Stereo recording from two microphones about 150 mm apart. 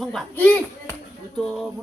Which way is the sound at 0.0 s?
Centre (ahead or behind).